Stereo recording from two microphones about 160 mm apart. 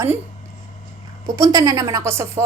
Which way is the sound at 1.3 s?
20° right (ahead or behind).